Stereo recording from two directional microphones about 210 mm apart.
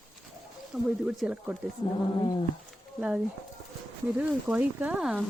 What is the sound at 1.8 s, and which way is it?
Speech, 25° left (ahead or behind).